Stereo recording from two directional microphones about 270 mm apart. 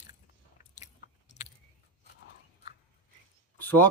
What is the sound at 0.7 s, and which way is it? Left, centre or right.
Biting, left.